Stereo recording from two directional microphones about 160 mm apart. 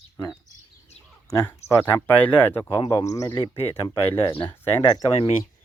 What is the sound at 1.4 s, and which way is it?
Speech, 15° left (ahead or behind).